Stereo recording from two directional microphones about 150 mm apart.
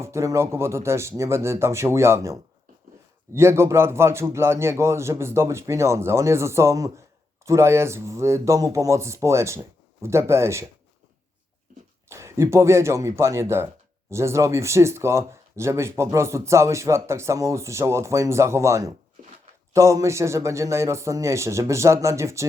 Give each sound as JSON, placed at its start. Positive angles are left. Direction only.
{"t": 0.0, "sound": "a man's voice", "side_deg": -20}
{"t": 12.0, "sound": "speech", "side_deg": -20}